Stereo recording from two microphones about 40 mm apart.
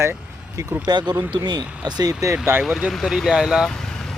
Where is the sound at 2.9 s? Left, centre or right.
Centre.